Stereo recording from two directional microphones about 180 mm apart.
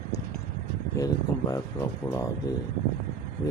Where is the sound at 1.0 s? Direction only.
15° left (ahead or behind).